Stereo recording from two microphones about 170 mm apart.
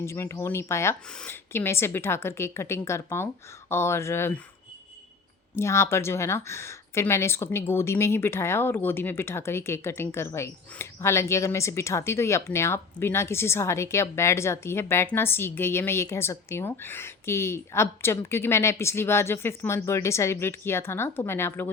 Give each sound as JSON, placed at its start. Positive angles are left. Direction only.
{"t": 0.0, "sound": "speech", "side_deg": 15}
{"t": 5.5, "sound": "speech", "side_deg": 15}